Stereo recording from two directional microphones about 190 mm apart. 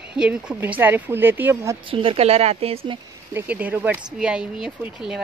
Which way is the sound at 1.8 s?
30° right (ahead or behind).